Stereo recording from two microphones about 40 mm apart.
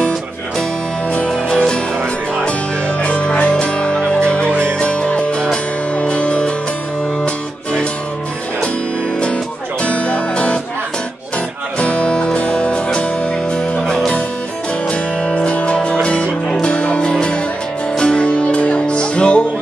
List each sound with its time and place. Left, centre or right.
1.5 s music: centre
3.0 s music: left
9.8 s music: left
11.8 s music: left